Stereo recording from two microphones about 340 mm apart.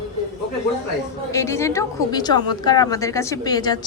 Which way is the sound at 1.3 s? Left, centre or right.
Centre.